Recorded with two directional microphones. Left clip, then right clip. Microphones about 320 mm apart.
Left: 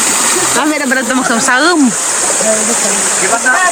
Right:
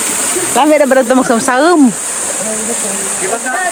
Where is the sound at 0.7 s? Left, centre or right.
Centre.